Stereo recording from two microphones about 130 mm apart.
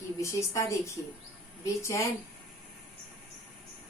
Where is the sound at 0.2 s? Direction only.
20° left (ahead or behind).